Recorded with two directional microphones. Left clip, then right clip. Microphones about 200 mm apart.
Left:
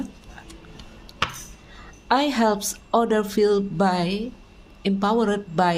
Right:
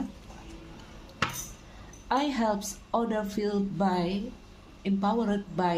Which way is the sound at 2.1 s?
50° left (ahead or behind).